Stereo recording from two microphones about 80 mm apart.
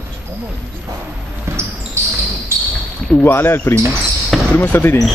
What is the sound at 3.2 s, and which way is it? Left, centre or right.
A man's voice, left.